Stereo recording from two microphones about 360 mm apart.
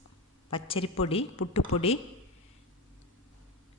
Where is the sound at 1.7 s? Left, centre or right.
Left.